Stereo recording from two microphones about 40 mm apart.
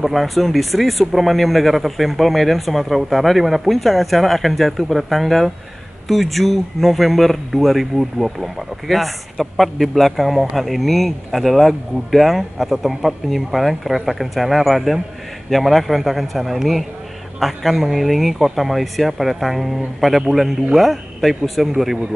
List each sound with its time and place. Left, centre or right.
0.0 s speech: centre